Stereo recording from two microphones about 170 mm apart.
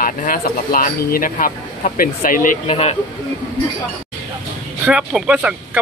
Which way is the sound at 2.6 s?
40° left (ahead or behind).